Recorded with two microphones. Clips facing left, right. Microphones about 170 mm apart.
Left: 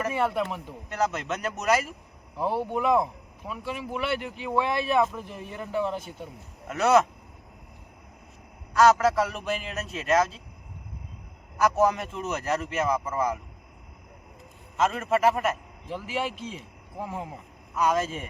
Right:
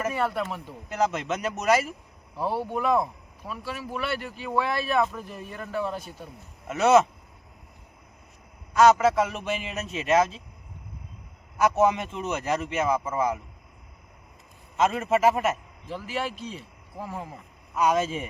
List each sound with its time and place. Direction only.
0.1 s speech: 20° left (ahead or behind)
0.9 s speech: 5° right (ahead or behind)
2.3 s speech: 15° left (ahead or behind)
6.7 s speech: 5° right (ahead or behind)
8.8 s speech: centre (ahead or behind)
11.8 s speech: 5° right (ahead or behind)
14.8 s a man's voice: 5° right (ahead or behind)
15.9 s speech: 15° left (ahead or behind)
17.7 s speech: 5° right (ahead or behind)